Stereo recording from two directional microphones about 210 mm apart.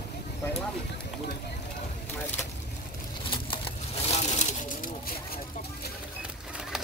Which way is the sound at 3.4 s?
30° left (ahead or behind).